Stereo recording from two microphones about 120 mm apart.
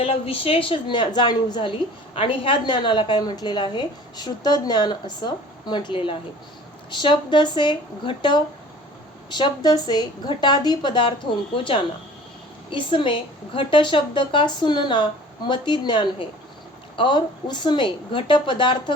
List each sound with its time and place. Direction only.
0.0 s a woman's voice: 50° left (ahead or behind)
2.1 s a woman's voice: 50° left (ahead or behind)